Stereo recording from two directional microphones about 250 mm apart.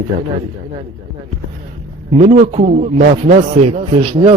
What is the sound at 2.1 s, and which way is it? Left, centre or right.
A man's voice, right.